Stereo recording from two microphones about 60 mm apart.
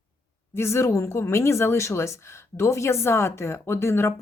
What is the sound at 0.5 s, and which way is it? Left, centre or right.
Speech, left.